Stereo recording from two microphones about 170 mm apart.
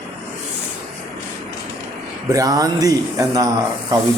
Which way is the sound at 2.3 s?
20° right (ahead or behind).